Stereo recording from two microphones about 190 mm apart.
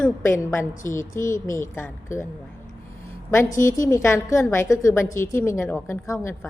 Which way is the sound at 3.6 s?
15° left (ahead or behind).